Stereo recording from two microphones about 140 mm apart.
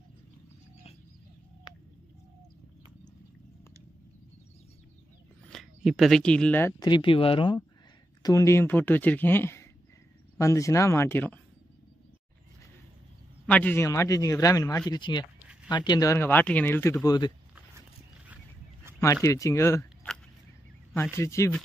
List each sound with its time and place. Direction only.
5.5 s speech: centre (ahead or behind)
6.8 s speech: 35° left (ahead or behind)
8.2 s speech: 20° left (ahead or behind)
13.5 s speech: 10° left (ahead or behind)
13.8 s speech: 25° left (ahead or behind)
14.9 s speech: 35° left (ahead or behind)
16.2 s speech: 15° left (ahead or behind)
18.9 s a sound: 20° right (ahead or behind)
19.2 s speech: 25° left (ahead or behind)
21.1 s speech: 20° left (ahead or behind)